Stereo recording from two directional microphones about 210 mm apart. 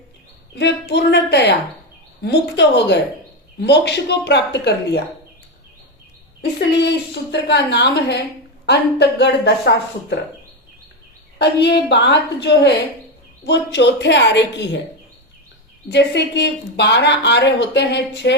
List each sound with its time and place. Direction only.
0.5 s a woman's voice: 55° left (ahead or behind)
6.7 s a woman's voice: 55° left (ahead or behind)
11.3 s speech: 55° left (ahead or behind)
15.9 s speech: 55° left (ahead or behind)